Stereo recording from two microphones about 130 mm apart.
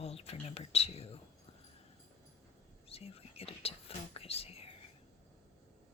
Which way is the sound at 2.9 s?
50° left (ahead or behind).